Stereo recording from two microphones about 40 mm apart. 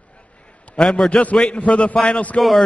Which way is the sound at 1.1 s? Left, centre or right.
Left.